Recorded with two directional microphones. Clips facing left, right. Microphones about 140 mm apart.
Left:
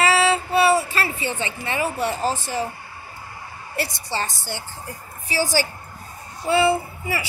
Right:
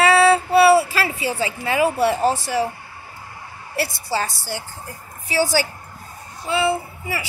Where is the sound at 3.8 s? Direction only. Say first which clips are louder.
Right 3 dB; 5° right (ahead or behind).